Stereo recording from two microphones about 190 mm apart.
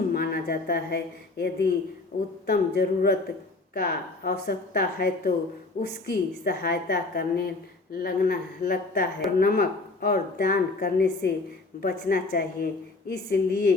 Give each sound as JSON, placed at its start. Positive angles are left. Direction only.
{"t": 0.1, "sound": "a woman's voice", "side_deg": 55}